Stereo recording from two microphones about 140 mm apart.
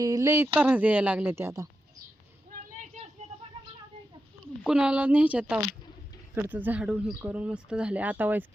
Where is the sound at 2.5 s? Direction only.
70° right (ahead or behind).